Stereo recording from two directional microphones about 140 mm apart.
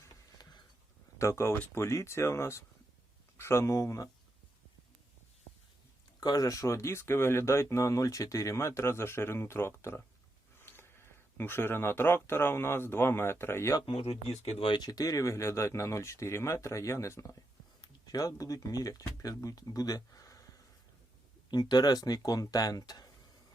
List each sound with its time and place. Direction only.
0.0 s a sound: 25° left (ahead or behind)
1.2 s speech: 20° left (ahead or behind)
6.1 s speech: 25° left (ahead or behind)
13.8 s speech: 40° left (ahead or behind); by 20.4 s 25° left (ahead or behind)
21.5 s speech: 30° left (ahead or behind)